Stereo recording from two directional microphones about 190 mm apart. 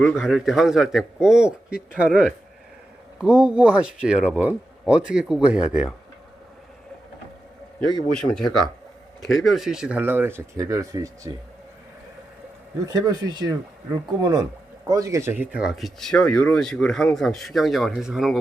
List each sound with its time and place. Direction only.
0.0 s speech: centre (ahead or behind)
8.3 s speech: centre (ahead or behind); by 11.3 s 15° right (ahead or behind)
12.8 s speech: 20° right (ahead or behind); by 18.3 s centre (ahead or behind)